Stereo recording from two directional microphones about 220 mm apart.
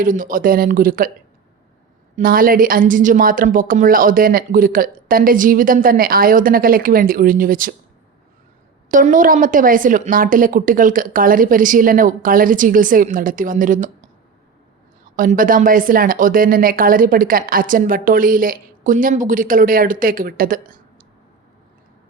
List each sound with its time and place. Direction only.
0.0 s a woman's voice: 40° right (ahead or behind)
2.1 s a woman's voice: 40° right (ahead or behind)
8.9 s a woman's voice: 35° right (ahead or behind)
15.1 s a woman's voice: 40° right (ahead or behind)